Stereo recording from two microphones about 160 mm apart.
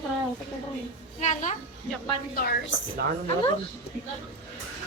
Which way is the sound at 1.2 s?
50° left (ahead or behind).